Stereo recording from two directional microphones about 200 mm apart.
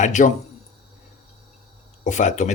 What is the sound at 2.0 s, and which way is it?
Speech, 35° left (ahead or behind).